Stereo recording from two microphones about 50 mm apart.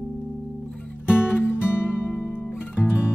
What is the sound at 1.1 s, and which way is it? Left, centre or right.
Music, left.